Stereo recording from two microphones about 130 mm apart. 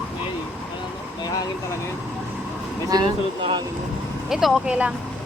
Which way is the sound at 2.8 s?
35° right (ahead or behind).